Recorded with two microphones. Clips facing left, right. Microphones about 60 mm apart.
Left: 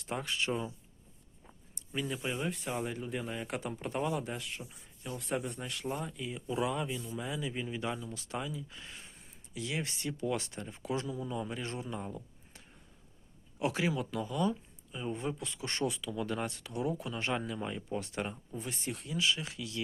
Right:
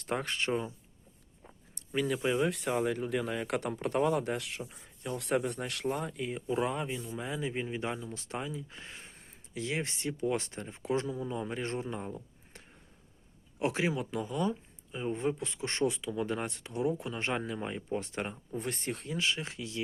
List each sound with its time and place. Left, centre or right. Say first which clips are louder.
0.0 s speech: right 2 dB; right
1.9 s speech: right 6 dB; right
4.7 s speech: right 4 dB; right
6.5 s speech: right 1 dB; right
18.5 s speech: right 4 dB; right